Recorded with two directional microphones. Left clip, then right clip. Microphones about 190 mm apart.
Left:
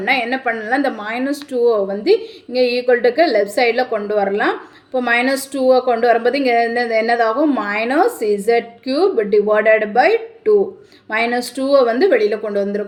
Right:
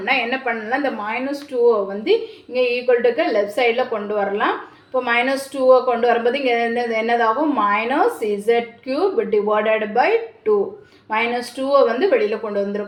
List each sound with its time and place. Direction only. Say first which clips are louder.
0.0 s a woman's voice: left 2 dB; 30° left (ahead or behind)